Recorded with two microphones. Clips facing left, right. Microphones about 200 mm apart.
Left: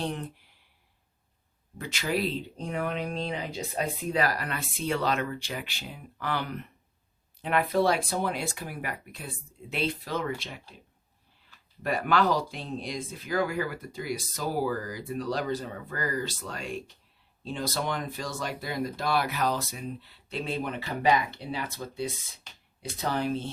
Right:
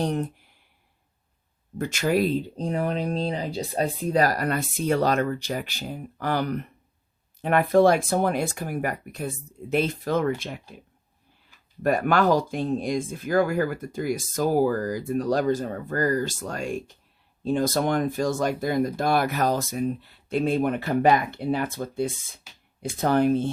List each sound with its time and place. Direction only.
0.0 s speech: 45° right (ahead or behind)
1.8 s speech: 45° right (ahead or behind)
11.8 s speech: 50° right (ahead or behind)
22.5 s a sound: 5° right (ahead or behind)
22.8 s speech: 50° right (ahead or behind)